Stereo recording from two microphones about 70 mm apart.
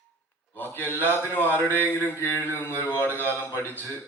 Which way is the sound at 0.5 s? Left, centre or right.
Left.